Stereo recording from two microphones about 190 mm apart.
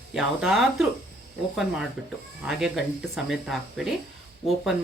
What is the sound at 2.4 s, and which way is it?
Speech, centre (ahead or behind).